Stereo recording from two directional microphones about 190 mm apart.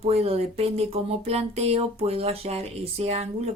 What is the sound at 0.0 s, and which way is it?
A woman's voice, 30° right (ahead or behind).